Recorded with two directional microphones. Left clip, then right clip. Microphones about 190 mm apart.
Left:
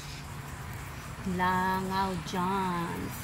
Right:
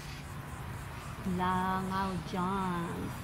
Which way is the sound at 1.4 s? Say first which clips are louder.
Left 4 dB; 35° left (ahead or behind).